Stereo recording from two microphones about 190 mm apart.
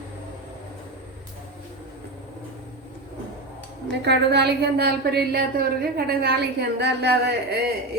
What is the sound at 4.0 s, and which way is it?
A woman's voice, 60° right (ahead or behind).